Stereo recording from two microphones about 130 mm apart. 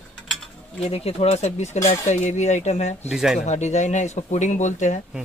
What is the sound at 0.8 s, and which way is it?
Speech, 50° left (ahead or behind).